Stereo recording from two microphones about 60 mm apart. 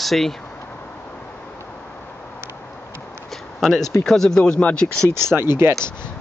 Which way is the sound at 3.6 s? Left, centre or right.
Centre.